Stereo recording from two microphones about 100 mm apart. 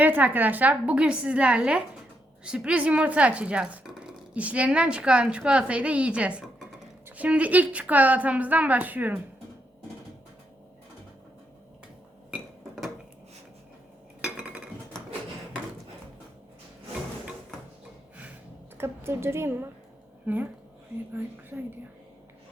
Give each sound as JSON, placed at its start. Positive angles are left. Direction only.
{"t": 0.0, "sound": "speech", "side_deg": -20}
{"t": 12.3, "sound": "a sound", "side_deg": 0}
{"t": 14.2, "sound": "cutlery", "side_deg": -10}
{"t": 18.8, "sound": "speech", "side_deg": -25}